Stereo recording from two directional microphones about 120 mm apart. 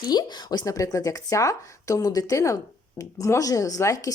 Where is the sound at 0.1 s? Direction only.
35° left (ahead or behind).